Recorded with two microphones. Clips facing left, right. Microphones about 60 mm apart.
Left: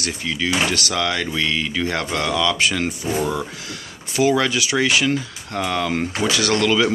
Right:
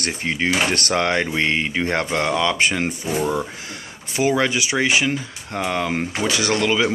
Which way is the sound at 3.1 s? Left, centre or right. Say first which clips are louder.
Right 1 dB; centre.